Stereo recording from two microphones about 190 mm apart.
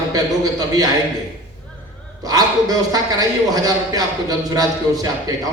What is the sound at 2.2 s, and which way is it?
A man's voice, 20° right (ahead or behind).